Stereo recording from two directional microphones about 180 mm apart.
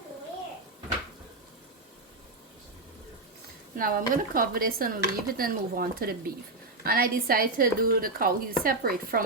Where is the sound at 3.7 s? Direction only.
50° right (ahead or behind).